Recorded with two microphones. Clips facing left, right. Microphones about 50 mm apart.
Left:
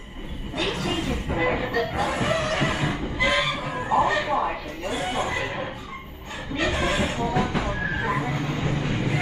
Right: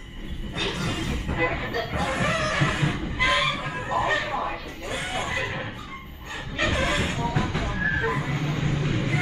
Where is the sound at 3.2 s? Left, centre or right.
Centre.